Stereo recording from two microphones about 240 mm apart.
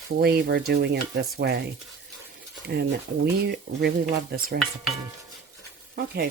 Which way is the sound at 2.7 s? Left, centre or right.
Right.